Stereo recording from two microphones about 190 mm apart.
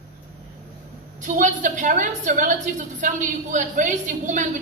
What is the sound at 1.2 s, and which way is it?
A woman's voice, 40° right (ahead or behind).